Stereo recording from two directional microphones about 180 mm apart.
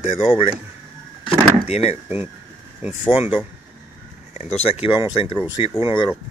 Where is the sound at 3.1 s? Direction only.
30° left (ahead or behind).